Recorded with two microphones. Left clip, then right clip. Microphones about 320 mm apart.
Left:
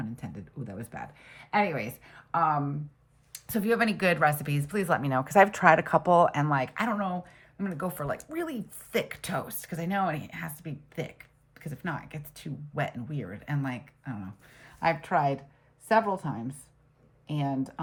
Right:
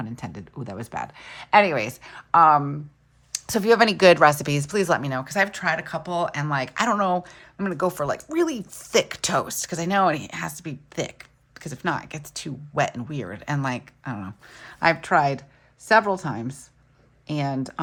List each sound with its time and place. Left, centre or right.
0.0 s speech: centre